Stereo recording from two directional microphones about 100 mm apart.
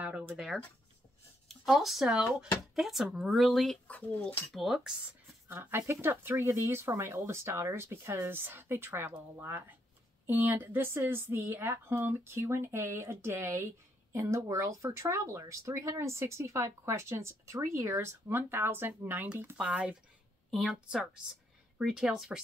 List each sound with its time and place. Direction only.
0.0 s a sound: 15° right (ahead or behind)
1.5 s speech: centre (ahead or behind); by 4.4 s 15° left (ahead or behind)
4.5 s speech: centre (ahead or behind)
5.5 s speech: 20° right (ahead or behind); by 22.4 s 5° right (ahead or behind)